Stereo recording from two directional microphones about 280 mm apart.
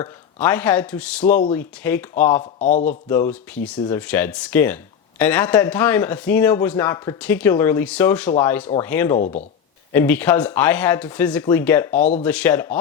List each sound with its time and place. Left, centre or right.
0.0 s speech: centre
2.4 s a man's voice: left
3.1 s speech: centre
9.2 s a man's voice: left
9.9 s speech: centre